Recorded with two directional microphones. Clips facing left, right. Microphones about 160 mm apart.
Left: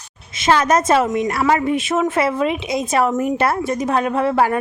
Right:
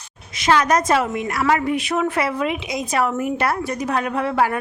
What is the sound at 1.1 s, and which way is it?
Speech, 40° left (ahead or behind).